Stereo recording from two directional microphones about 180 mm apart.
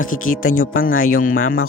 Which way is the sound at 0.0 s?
50° left (ahead or behind).